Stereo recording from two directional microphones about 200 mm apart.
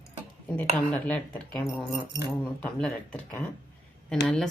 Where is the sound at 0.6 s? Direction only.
5° left (ahead or behind).